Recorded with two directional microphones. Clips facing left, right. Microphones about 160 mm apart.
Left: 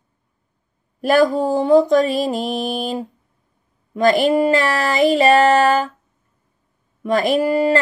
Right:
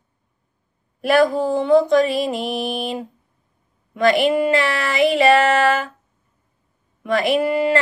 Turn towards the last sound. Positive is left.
turn(degrees=35)  # may be behind; listen again after turning